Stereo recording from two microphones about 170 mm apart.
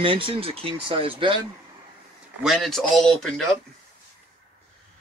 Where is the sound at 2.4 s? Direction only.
Centre (ahead or behind).